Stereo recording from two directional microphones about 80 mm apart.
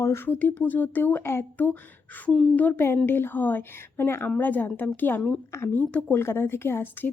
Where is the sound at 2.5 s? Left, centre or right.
Left.